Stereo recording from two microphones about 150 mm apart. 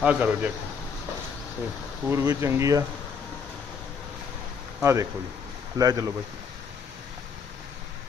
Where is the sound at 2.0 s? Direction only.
20° right (ahead or behind).